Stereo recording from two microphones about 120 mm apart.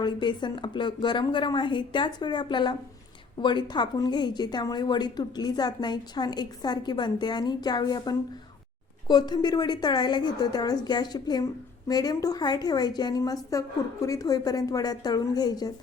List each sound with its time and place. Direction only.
0.0 s a woman's voice: 40° left (ahead or behind)